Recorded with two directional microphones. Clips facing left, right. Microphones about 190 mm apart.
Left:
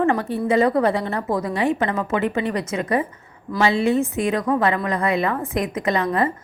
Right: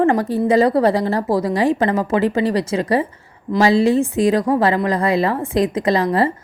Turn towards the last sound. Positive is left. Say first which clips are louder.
# right 4 dB
turn(degrees=-35)  # may be behind; listen again after turning